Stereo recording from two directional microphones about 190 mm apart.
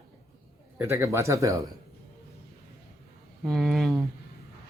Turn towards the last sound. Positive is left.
turn(degrees=0)  # may be behind; listen again after turning